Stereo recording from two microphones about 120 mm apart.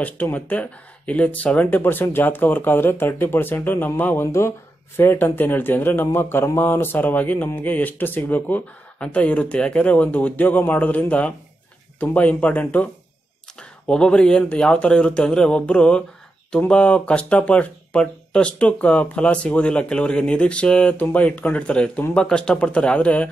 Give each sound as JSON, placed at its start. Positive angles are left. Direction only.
{"t": 0.0, "sound": "speech", "side_deg": 15}